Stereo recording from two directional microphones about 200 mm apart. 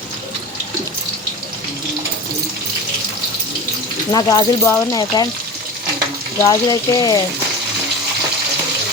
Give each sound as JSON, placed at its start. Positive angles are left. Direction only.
{"t": 4.1, "sound": "speech", "side_deg": 20}
{"t": 6.4, "sound": "speech", "side_deg": 20}